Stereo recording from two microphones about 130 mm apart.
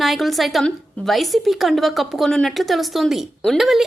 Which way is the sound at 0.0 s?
Centre (ahead or behind).